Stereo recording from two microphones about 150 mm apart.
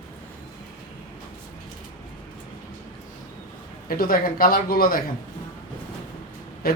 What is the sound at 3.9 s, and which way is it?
Speech, 75° left (ahead or behind).